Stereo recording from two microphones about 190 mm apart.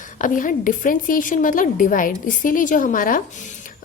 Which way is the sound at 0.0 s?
45° left (ahead or behind).